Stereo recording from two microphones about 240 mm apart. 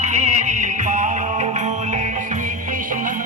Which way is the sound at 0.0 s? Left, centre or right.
Right.